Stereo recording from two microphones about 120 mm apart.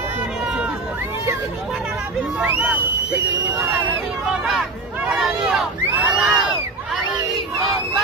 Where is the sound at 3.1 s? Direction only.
20° right (ahead or behind).